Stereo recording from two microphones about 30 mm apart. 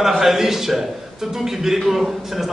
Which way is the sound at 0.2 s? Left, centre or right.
Centre.